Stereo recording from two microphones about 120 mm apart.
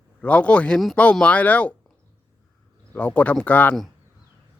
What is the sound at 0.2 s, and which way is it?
A man's voice, 10° left (ahead or behind).